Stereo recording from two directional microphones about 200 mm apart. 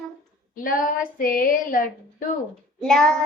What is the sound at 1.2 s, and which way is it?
Female singing, 45° left (ahead or behind).